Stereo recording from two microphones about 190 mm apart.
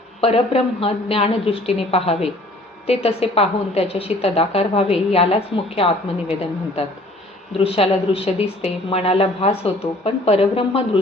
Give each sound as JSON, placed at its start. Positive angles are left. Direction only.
{"t": 0.2, "sound": "a woman's voice", "side_deg": 30}
{"t": 7.6, "sound": "a woman's voice", "side_deg": 30}